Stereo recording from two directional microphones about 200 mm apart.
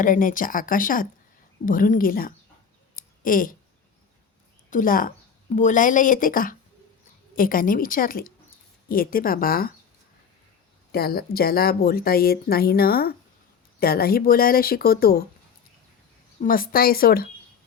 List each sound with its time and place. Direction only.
0.0 s a woman's voice: 40° left (ahead or behind)
2.9 s a sound: 45° left (ahead or behind)
4.7 s a woman's voice: 45° left (ahead or behind)
10.9 s a woman's voice: 50° left (ahead or behind)
16.4 s a woman's voice: 45° left (ahead or behind)